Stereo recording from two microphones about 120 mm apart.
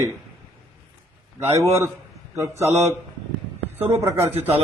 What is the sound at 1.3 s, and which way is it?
Speech, 25° right (ahead or behind).